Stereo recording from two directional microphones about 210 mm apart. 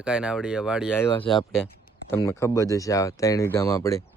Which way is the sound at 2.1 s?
10° left (ahead or behind).